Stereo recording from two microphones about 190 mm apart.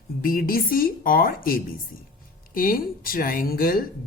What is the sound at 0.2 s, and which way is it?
Speech, 50° left (ahead or behind).